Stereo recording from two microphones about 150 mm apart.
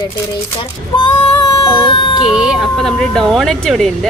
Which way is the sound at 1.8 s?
35° left (ahead or behind).